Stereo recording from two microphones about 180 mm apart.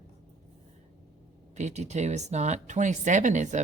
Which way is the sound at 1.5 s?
40° right (ahead or behind).